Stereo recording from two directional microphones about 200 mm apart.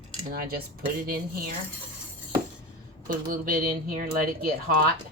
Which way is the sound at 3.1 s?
45° right (ahead or behind).